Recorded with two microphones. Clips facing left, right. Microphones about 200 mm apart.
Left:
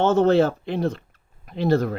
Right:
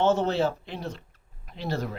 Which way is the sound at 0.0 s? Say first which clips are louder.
Left 6 dB; 55° left (ahead or behind).